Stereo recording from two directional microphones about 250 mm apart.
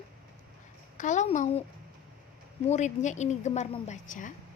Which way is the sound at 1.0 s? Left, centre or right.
Left.